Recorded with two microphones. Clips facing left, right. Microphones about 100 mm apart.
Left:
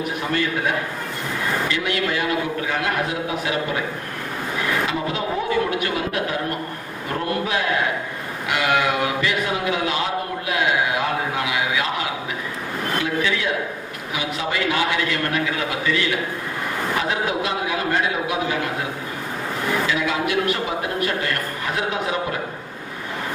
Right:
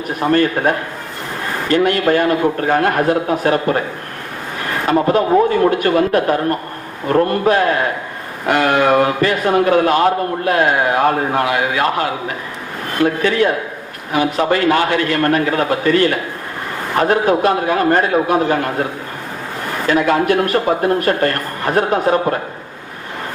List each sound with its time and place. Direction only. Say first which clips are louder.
0.2 s a man's voice: right 11 dB; 50° right (ahead or behind)
4.9 s a man's voice: right 11 dB; 50° right (ahead or behind)
19.9 s a man's voice: right 8 dB; 50° right (ahead or behind)